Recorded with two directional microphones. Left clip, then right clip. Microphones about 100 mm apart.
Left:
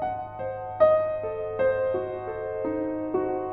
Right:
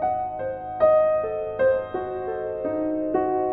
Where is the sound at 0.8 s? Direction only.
40° left (ahead or behind).